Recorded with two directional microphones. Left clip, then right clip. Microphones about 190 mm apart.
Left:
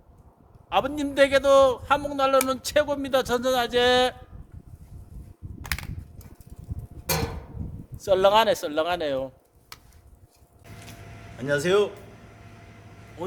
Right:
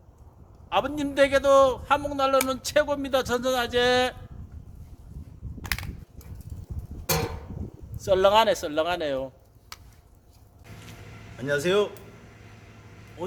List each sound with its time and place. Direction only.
0.7 s a man's voice: 20° left (ahead or behind)
5.6 s crushing: centre (ahead or behind)
7.1 s a sound: 5° right (ahead or behind)
7.9 s speech: 20° left (ahead or behind)
9.7 s a sound: 5° right (ahead or behind)
11.3 s speech: 10° left (ahead or behind)
13.2 s vehicle: 10° left (ahead or behind)